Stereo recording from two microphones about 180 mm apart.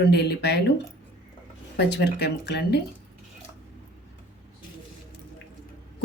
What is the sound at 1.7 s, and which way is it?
Speech, 70° left (ahead or behind).